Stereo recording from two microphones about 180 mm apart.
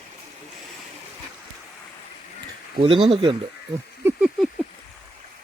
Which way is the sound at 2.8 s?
30° right (ahead or behind).